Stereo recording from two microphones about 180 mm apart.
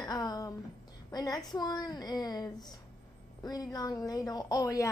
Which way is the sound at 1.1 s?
20° left (ahead or behind).